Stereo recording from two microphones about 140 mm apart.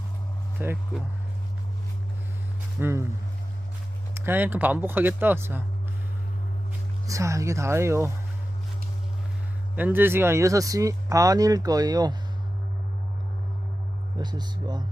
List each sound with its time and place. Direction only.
0.6 s speech: 15° right (ahead or behind)
2.8 s speech: 20° right (ahead or behind)
4.1 s speech: 15° right (ahead or behind)
7.1 s speech: 20° right (ahead or behind)
9.7 s speech: 15° right (ahead or behind)
14.2 s speech: 30° right (ahead or behind)